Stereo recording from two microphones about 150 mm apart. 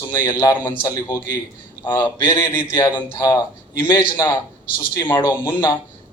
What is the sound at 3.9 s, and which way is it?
A man's voice, 15° left (ahead or behind).